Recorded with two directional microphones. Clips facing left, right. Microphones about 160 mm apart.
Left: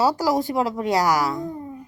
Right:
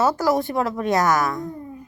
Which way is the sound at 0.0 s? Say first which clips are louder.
Right 1 dB; 15° left (ahead or behind).